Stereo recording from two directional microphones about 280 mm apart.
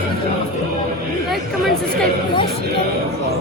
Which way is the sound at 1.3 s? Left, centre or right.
Centre.